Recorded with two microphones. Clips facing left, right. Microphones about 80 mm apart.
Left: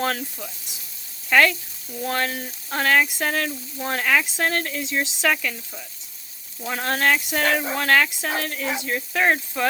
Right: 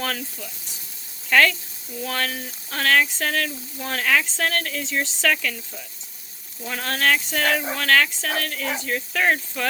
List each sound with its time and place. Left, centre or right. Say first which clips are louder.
0.0 s speech: left 3 dB; left
1.3 s sizzle: even; centre
4.0 s speech: even; centre
4.4 s sizzle: left 1 dB; left
4.8 s speech: left 1 dB; centre
6.7 s sizzle: left 1 dB; left
7.7 s speech: even; left
8.3 s sizzle: even; left